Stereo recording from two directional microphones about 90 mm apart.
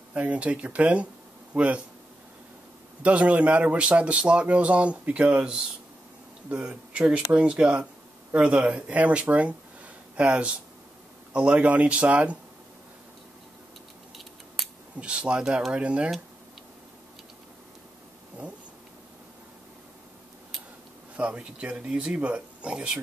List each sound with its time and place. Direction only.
0.1 s speech: 15° right (ahead or behind)
3.0 s speech: 15° right (ahead or behind)
15.0 s speech: 10° right (ahead or behind)
21.2 s speech: 15° right (ahead or behind)